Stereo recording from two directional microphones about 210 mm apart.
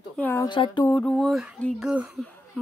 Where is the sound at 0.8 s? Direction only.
5° left (ahead or behind).